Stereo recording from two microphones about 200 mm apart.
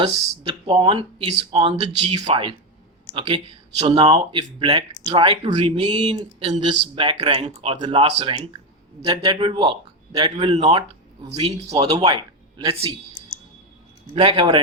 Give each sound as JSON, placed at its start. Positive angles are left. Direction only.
{"t": 0.0, "sound": "speech", "side_deg": -25}
{"t": 14.2, "sound": "speech", "side_deg": -25}